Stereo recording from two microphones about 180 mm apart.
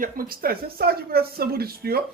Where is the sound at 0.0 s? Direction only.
55° right (ahead or behind).